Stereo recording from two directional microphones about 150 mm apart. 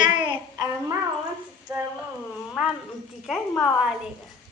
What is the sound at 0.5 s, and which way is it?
Speech, 20° right (ahead or behind).